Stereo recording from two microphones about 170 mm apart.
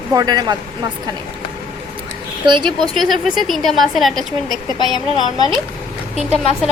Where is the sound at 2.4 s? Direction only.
25° right (ahead or behind).